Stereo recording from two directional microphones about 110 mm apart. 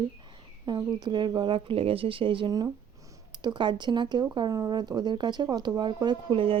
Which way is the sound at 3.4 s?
45° right (ahead or behind).